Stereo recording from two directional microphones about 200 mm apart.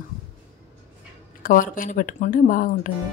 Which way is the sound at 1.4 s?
40° left (ahead or behind).